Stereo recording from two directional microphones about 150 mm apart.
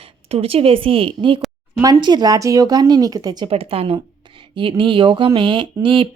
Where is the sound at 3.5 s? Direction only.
40° right (ahead or behind).